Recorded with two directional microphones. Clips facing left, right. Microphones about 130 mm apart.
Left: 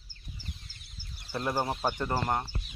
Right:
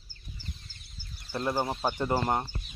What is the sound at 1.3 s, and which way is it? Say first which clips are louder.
Speech: right 1 dB; 5° left (ahead or behind).